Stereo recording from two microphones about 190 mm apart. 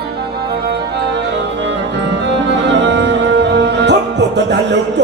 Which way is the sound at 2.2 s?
65° right (ahead or behind).